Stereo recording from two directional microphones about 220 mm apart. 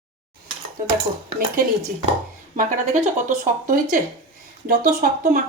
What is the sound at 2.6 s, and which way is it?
A woman's voice, 35° right (ahead or behind).